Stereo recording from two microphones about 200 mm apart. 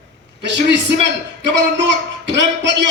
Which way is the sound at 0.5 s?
60° right (ahead or behind).